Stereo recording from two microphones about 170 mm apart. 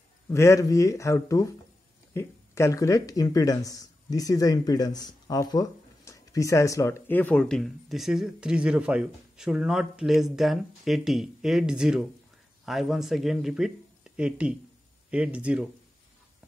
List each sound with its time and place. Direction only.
0.3 s speech: 15° left (ahead or behind); by 15.7 s 5° right (ahead or behind)